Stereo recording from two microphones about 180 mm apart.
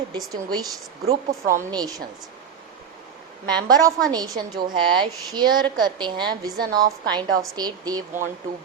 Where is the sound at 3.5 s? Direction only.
20° right (ahead or behind).